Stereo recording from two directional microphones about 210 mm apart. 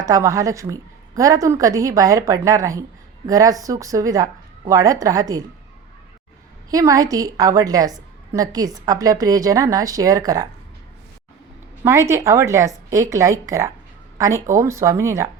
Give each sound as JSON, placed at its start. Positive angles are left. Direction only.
{"t": 0.0, "sound": "a woman's voice", "side_deg": -15}
{"t": 6.7, "sound": "a woman's voice", "side_deg": -15}
{"t": 11.9, "sound": "a woman's voice", "side_deg": -15}